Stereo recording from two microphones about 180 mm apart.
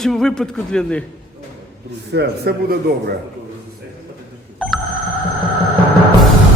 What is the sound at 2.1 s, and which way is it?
Speech, 60° right (ahead or behind).